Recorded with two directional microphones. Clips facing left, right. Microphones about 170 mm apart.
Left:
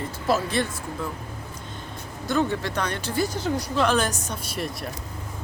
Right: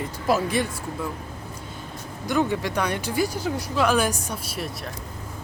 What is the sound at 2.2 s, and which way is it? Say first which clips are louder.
Speech: right 1 dB; 15° right (ahead or behind).